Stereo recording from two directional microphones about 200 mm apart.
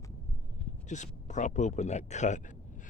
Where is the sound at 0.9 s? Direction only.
35° left (ahead or behind).